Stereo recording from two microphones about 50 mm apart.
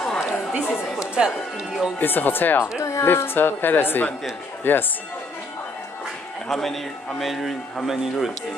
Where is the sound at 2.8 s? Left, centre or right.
Left.